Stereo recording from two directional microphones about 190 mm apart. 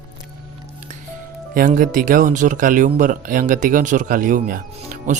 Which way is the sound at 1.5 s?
45° right (ahead or behind).